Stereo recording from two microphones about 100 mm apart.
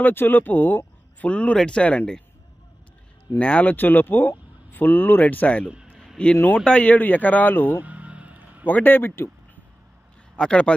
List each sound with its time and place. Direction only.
0.0 s speech: 20° left (ahead or behind)
3.3 s speech: 15° left (ahead or behind)
5.7 s a sound: 10° right (ahead or behind)
6.1 s speech: 10° left (ahead or behind)
7.7 s a sound: 15° right (ahead or behind)
8.6 s speech: 20° left (ahead or behind)
10.3 s speech: 10° left (ahead or behind)